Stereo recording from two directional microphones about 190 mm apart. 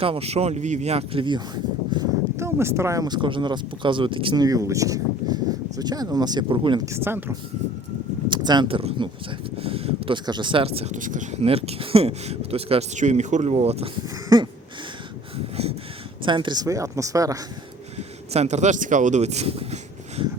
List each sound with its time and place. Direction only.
0.0 s speech: 30° right (ahead or behind); by 7.3 s 10° right (ahead or behind)
8.3 s speech: 25° right (ahead or behind)
14.0 s a sound: 20° right (ahead or behind)
16.2 s speech: 25° right (ahead or behind)
17.9 s speech: 35° right (ahead or behind)